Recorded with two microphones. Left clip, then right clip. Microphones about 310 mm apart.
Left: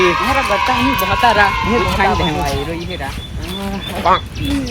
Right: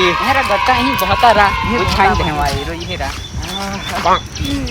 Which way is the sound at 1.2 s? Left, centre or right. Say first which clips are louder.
Right 2 dB; centre.